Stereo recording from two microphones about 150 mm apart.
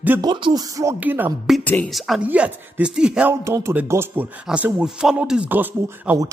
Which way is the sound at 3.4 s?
20° right (ahead or behind).